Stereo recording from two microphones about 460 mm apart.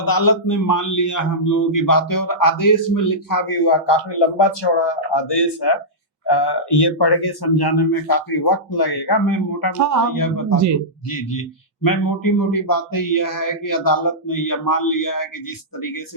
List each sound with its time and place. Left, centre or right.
0.0 s a man's voice: left
9.7 s speech: right
10.2 s a man's voice: left